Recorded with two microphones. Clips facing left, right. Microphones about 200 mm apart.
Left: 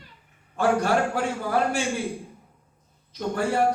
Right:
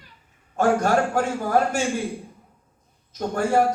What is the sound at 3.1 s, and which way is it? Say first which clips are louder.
Speech: right 1 dB; 45° right (ahead or behind).